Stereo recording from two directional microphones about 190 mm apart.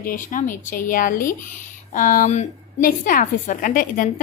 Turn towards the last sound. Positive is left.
turn(degrees=45)  # may be behind; listen again after turning